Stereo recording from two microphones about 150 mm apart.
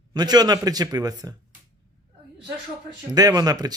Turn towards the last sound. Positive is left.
turn(degrees=-25)  # may be behind; listen again after turning